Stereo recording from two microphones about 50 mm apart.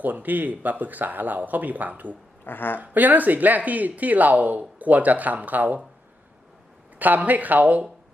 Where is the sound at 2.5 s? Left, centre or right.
Left.